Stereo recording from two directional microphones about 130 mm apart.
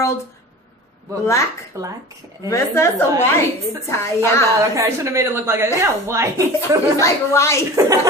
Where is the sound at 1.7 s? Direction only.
20° right (ahead or behind).